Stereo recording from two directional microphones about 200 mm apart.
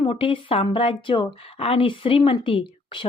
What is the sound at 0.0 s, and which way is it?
Speech, 25° left (ahead or behind).